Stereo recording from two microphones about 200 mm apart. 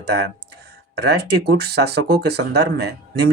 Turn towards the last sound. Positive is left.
turn(degrees=-55)  # may be behind; listen again after turning